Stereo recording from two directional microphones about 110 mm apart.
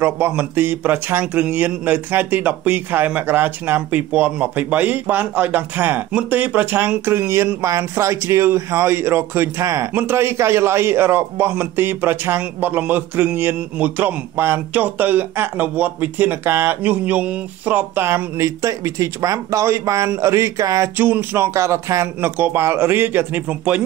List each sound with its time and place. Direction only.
0.0 s a man's voice: 20° right (ahead or behind)
21.0 s a man's voice: 20° right (ahead or behind)